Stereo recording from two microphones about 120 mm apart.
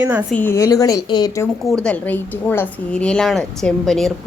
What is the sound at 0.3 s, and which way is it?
Speech, 20° left (ahead or behind).